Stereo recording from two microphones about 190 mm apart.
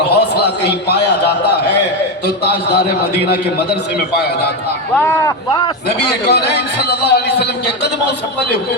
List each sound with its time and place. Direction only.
0.1 s a man's voice: 60° left (ahead or behind)
4.9 s speech: 15° left (ahead or behind)
6.0 s a man's voice: 60° left (ahead or behind)